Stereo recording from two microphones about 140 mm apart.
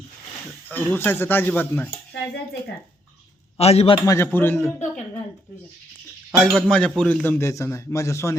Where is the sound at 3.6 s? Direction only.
45° left (ahead or behind).